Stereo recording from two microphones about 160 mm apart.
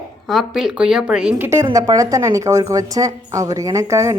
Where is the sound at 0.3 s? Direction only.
Centre (ahead or behind).